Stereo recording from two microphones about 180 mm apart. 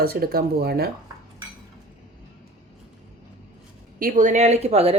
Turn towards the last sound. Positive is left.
turn(degrees=-35)  # may be behind; listen again after turning